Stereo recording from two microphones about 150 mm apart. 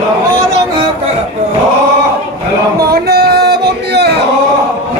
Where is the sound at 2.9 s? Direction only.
90° right.